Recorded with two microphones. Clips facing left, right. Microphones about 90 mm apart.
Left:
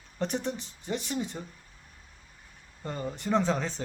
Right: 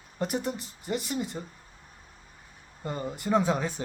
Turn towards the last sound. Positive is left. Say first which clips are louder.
# right 2 dB
turn(degrees=-10)  # may be behind; listen again after turning